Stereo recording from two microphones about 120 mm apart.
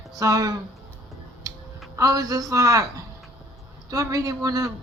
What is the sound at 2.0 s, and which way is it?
Speech, 30° right (ahead or behind).